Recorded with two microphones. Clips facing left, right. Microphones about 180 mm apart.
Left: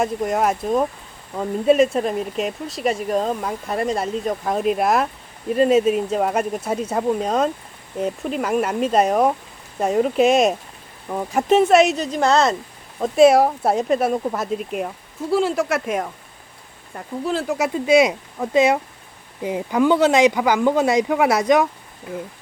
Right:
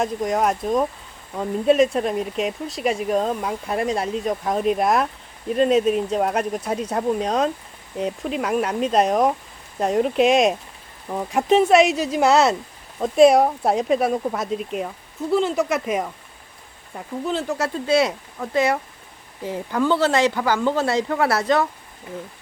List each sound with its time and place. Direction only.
0.0 s speech: 5° left (ahead or behind)
17.6 s speech: 15° left (ahead or behind)